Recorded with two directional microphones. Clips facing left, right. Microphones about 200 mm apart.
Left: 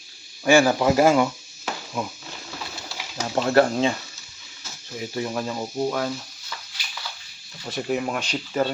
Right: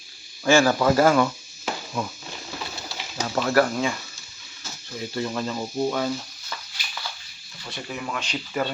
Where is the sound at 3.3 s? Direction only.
25° left (ahead or behind).